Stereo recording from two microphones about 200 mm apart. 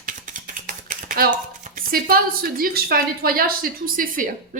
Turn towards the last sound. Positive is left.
turn(degrees=-45)  # may be behind; listen again after turning